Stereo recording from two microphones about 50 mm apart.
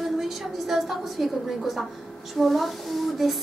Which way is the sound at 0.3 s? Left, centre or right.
Centre.